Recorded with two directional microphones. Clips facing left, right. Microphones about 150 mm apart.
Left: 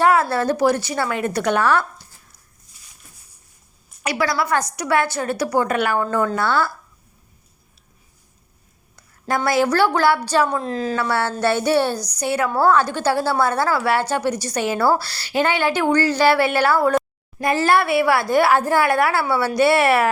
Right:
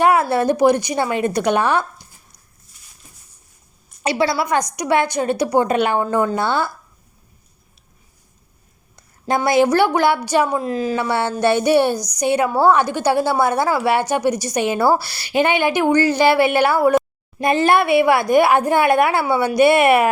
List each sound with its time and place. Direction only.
0.0 s a woman's voice: 15° right (ahead or behind)
4.0 s a woman's voice: 25° right (ahead or behind)
9.2 s a woman's voice: 20° right (ahead or behind)